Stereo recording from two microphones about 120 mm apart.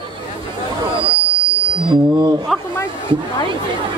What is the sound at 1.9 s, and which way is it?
Speech, 40° right (ahead or behind).